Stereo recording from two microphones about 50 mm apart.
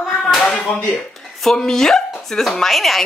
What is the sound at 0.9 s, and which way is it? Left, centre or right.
Speech, centre.